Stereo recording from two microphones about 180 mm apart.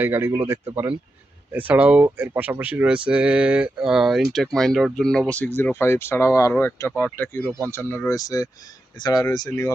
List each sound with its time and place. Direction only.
0.0 s speech: 10° right (ahead or behind); by 9.7 s 20° left (ahead or behind)